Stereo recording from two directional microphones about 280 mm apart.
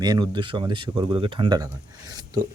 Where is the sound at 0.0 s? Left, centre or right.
Centre.